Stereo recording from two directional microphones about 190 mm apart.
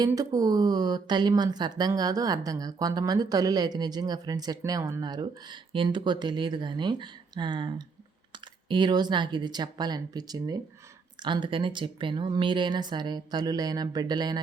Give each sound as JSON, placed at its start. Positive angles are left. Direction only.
{"t": 0.0, "sound": "speech", "side_deg": -20}